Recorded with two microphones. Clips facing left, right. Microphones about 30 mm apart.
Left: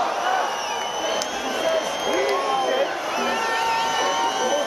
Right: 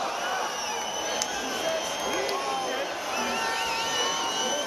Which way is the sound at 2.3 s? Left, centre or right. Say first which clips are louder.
Left 7 dB; left.